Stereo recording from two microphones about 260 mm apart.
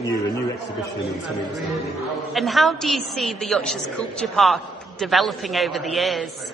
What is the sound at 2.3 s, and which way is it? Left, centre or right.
A woman's voice, centre.